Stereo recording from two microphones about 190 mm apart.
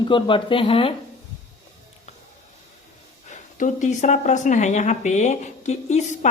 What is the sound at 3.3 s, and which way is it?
Speech, 40° left (ahead or behind).